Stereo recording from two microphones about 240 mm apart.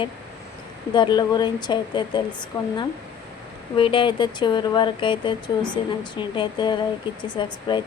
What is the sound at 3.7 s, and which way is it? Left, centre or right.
Speech, left.